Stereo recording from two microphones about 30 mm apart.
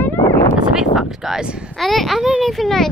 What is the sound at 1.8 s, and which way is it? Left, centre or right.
Speech, centre.